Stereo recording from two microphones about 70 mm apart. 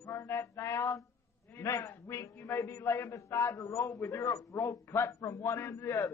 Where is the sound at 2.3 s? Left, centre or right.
Left.